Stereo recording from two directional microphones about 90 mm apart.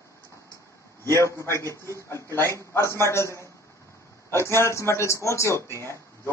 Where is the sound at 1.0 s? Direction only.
30° left (ahead or behind).